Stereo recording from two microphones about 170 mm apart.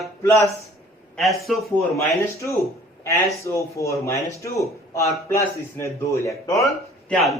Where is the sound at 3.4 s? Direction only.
15° left (ahead or behind).